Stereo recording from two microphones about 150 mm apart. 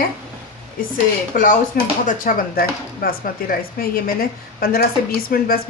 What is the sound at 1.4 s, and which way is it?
Speech, 60° left (ahead or behind).